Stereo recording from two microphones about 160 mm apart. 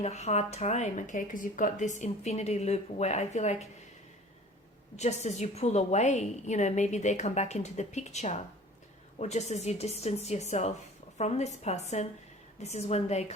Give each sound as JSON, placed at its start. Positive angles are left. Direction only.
{"t": 0.0, "sound": "speech", "side_deg": 45}
{"t": 4.9, "sound": "speech", "side_deg": 45}